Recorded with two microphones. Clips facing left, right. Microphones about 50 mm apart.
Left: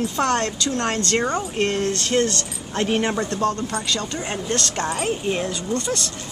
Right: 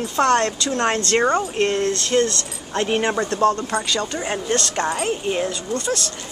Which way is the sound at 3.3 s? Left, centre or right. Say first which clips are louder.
Right 4 dB; right.